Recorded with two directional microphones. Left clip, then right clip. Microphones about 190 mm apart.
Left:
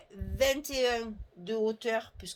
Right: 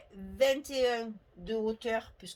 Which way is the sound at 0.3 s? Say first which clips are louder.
Even; 40° left (ahead or behind).